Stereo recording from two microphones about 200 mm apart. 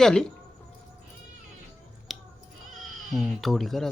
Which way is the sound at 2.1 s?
Centre (ahead or behind).